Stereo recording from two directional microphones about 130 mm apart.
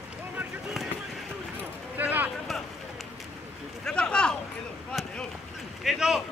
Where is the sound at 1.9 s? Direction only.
15° right (ahead or behind).